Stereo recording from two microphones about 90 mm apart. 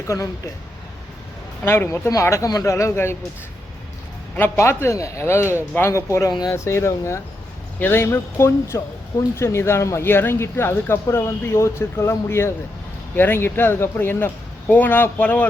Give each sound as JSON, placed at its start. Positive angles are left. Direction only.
{"t": 0.1, "sound": "speech", "side_deg": 35}
{"t": 1.6, "sound": "speech", "side_deg": 30}
{"t": 4.5, "sound": "speech", "side_deg": 30}